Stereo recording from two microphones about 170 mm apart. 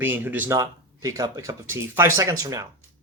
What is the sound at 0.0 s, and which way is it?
Speech, 10° right (ahead or behind).